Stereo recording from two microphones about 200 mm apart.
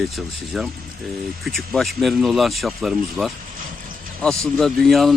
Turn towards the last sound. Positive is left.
turn(degrees=0)  # may be behind; listen again after turning